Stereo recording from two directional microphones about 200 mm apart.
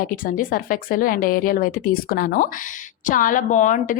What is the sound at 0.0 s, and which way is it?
A woman's voice, 45° left (ahead or behind).